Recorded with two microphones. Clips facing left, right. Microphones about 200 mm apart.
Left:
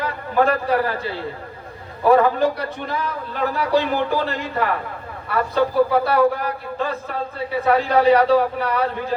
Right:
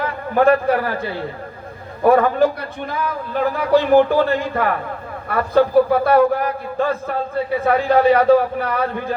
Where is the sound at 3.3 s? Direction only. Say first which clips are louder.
Right 4 dB; 50° right (ahead or behind).